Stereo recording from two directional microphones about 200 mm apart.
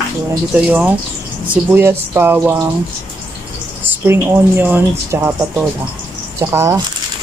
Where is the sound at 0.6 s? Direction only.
5° right (ahead or behind).